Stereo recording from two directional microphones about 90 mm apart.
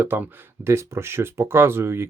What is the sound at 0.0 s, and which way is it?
Speech, 25° right (ahead or behind).